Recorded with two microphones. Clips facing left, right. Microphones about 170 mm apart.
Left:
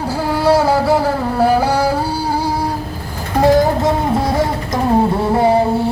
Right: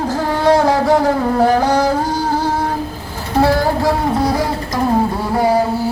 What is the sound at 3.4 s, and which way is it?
Music, 20° left (ahead or behind).